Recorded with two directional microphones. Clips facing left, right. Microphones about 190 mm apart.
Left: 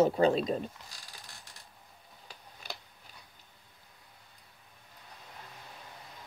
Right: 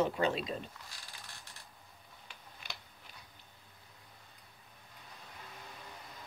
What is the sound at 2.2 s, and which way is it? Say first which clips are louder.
Tick-tock: left 5 dB; 35° left (ahead or behind).